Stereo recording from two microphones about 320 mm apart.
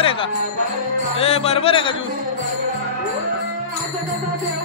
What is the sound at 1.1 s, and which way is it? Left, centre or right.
Speech, centre.